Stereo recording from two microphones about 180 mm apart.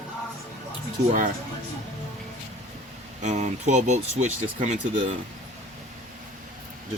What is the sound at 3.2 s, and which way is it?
Speech, 40° right (ahead or behind).